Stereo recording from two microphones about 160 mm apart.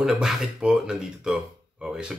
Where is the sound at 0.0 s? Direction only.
Centre (ahead or behind).